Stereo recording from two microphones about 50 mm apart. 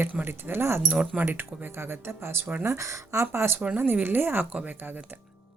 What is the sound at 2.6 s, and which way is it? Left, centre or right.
Speech, right.